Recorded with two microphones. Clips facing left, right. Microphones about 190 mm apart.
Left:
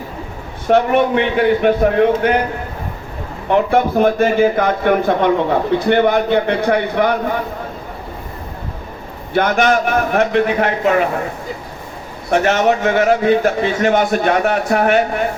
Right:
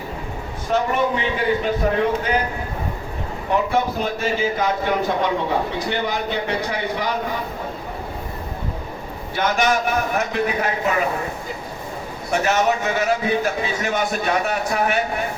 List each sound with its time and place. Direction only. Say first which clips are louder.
0.7 s a man's voice: left 7 dB; 65° left (ahead or behind)
3.5 s a man's voice: left 6 dB; 55° left (ahead or behind)
9.3 s a man's voice: left 6 dB; 55° left (ahead or behind)
12.3 s a man's voice: left 5 dB; 55° left (ahead or behind)